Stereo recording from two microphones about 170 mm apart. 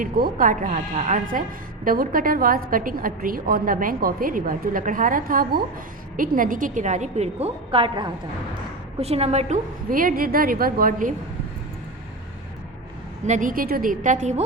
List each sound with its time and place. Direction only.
0.0 s a woman's voice: 55° right (ahead or behind)
13.2 s a woman's voice: 50° right (ahead or behind)